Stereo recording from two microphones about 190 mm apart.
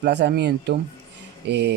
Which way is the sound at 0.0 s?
60° right (ahead or behind).